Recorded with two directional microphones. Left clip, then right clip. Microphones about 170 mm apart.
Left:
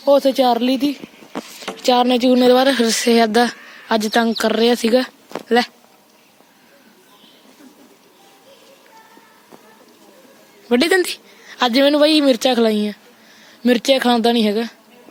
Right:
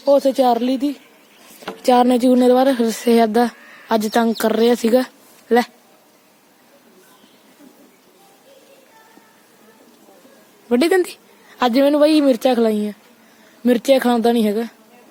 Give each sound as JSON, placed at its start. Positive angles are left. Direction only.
{"t": 0.0, "sound": "speech", "side_deg": 0}
{"t": 1.6, "sound": "speech", "side_deg": -35}
{"t": 10.7, "sound": "speech", "side_deg": -10}